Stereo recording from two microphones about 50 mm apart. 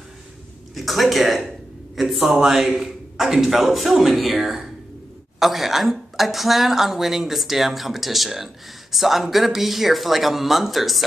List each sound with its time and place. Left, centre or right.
0.7 s speech: centre